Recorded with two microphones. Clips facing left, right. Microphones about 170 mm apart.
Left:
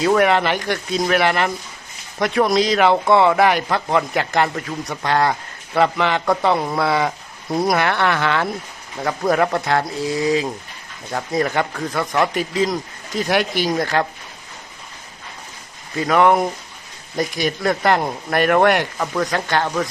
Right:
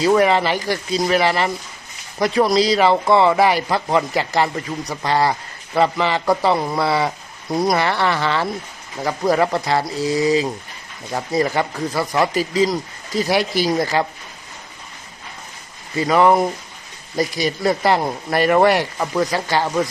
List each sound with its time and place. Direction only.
0.0 s speech: centre (ahead or behind)
13.4 s speech: 40° right (ahead or behind)
13.7 s speech: 5° right (ahead or behind)
16.0 s speech: centre (ahead or behind)